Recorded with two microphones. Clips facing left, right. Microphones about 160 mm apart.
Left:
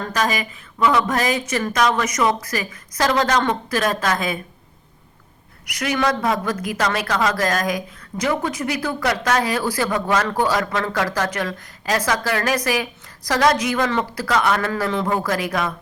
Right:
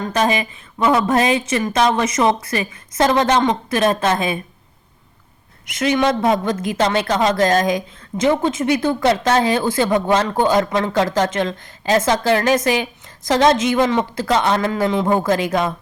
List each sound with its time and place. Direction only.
0.0 s a woman's voice: 25° right (ahead or behind)
5.6 s a woman's voice: 25° right (ahead or behind)